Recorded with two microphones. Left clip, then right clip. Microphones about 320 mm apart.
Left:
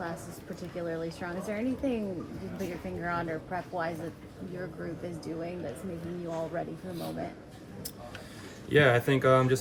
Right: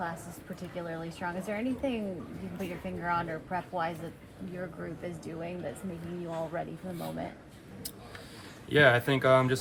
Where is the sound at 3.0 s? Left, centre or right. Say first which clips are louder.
Right 2 dB; right.